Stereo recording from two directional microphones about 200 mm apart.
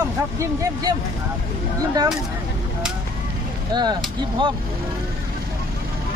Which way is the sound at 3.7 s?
20° right (ahead or behind).